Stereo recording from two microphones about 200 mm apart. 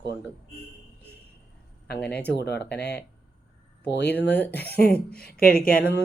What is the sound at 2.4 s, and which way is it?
Speech, 55° left (ahead or behind).